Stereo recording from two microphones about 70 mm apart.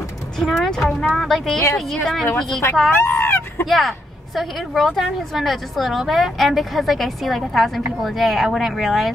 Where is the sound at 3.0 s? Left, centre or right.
Left.